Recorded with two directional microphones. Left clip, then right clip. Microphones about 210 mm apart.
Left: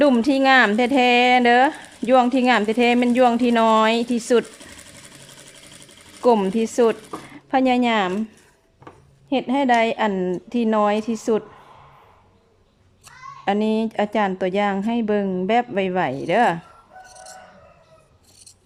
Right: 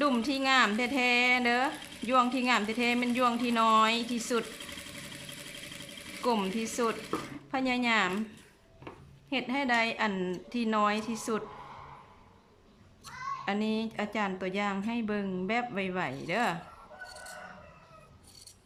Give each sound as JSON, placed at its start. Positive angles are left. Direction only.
{"t": 0.0, "sound": "speech", "side_deg": 35}
{"t": 6.2, "sound": "speech", "side_deg": 35}
{"t": 9.3, "sound": "speech", "side_deg": 35}
{"t": 13.4, "sound": "speech", "side_deg": 35}